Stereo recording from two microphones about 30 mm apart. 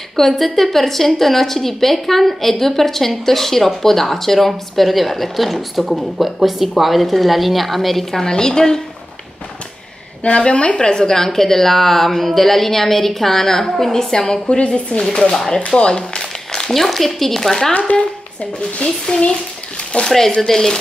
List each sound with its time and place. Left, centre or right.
0.1 s a woman's voice: centre
8.2 s a woman's voice: left
10.2 s a woman's voice: left
15.7 s a woman's voice: centre
16.2 s a sound: left
16.7 s a woman's voice: centre
17.9 s speech: left
20.1 s a woman's voice: centre